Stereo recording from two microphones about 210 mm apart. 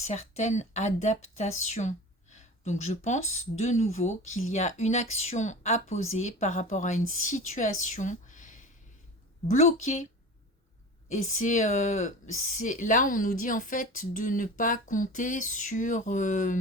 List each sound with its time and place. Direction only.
0.0 s speech: 35° left (ahead or behind)
11.1 s speech: 35° left (ahead or behind)